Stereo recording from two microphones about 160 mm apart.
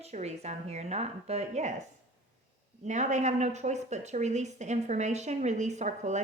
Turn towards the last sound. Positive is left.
turn(degrees=-45)  # may be behind; listen again after turning